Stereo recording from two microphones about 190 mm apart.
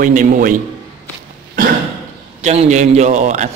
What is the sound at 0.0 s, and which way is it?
Speech, 40° right (ahead or behind).